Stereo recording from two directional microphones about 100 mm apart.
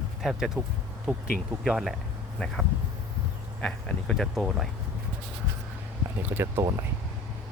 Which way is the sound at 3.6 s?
5° left (ahead or behind).